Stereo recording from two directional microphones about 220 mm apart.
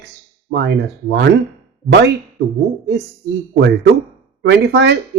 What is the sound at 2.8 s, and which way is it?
Speech, 50° right (ahead or behind).